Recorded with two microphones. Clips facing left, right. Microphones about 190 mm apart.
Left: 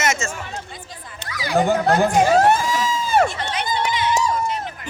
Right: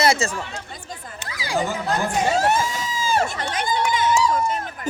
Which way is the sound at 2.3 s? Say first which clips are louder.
Left 4 dB; 65° left (ahead or behind).